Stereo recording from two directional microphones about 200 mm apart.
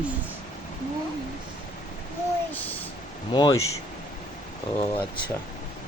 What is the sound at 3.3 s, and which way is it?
Speech, 20° left (ahead or behind).